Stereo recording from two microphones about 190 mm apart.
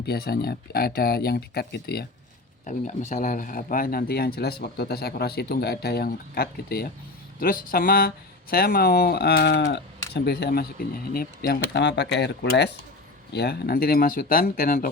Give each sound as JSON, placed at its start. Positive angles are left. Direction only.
{"t": 0.0, "sound": "speech", "side_deg": 55}
{"t": 2.6, "sound": "speech", "side_deg": 40}